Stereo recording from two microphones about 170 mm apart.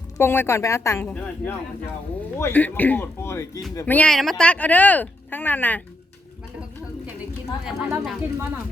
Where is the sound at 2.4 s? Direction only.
10° left (ahead or behind).